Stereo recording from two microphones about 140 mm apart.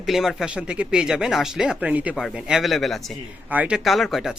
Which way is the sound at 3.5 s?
10° right (ahead or behind).